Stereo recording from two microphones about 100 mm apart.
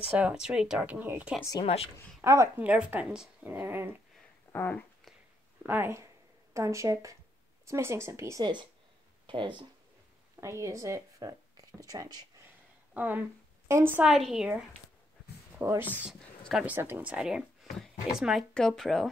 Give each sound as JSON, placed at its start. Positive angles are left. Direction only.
{"t": 0.0, "sound": "speech", "side_deg": -10}
{"t": 1.6, "sound": "speech", "side_deg": 80}
{"t": 2.2, "sound": "speech", "side_deg": -30}
{"t": 2.5, "sound": "speech", "side_deg": -10}
{"t": 4.5, "sound": "speech", "side_deg": 20}
{"t": 5.7, "sound": "speech", "side_deg": -25}
{"t": 9.2, "sound": "speech", "side_deg": -50}
{"t": 10.4, "sound": "speech", "side_deg": -30}
{"t": 12.9, "sound": "speech", "side_deg": -15}
{"t": 14.0, "sound": "speech", "side_deg": -5}
{"t": 15.6, "sound": "speech", "side_deg": -25}